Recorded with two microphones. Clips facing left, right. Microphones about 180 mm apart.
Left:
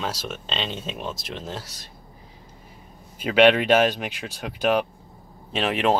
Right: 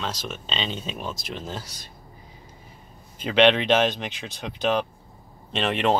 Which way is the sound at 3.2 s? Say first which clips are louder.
Left 2 dB; 5° left (ahead or behind).